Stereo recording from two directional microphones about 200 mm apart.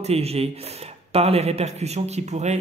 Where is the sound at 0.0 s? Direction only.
30° right (ahead or behind).